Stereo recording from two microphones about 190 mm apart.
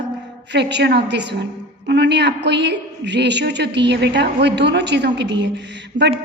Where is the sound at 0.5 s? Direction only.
65° right (ahead or behind).